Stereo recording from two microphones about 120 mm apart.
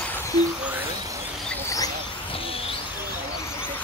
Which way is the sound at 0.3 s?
35° left (ahead or behind).